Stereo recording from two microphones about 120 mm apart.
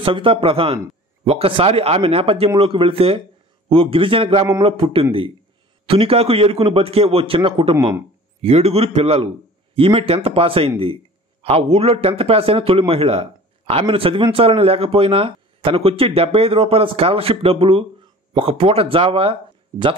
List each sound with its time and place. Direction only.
0.0 s a man's voice: 45° right (ahead or behind)